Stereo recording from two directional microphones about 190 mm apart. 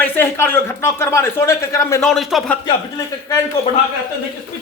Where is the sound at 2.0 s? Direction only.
Centre (ahead or behind).